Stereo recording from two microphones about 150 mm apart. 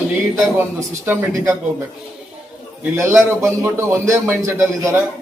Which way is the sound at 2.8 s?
15° right (ahead or behind).